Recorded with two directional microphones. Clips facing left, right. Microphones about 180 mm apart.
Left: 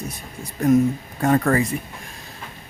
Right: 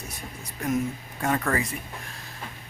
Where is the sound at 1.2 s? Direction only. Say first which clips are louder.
Left 7 dB; 40° left (ahead or behind).